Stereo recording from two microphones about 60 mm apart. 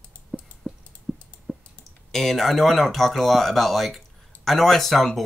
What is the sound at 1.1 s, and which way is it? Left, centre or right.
Typing, centre.